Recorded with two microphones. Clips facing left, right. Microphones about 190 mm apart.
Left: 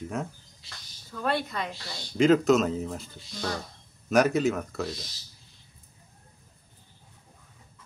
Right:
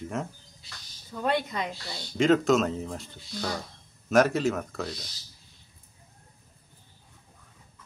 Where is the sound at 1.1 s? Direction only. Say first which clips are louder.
Right 1 dB; 15° right (ahead or behind).